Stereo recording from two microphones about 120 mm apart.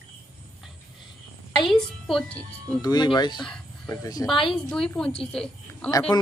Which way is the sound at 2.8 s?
35° left (ahead or behind).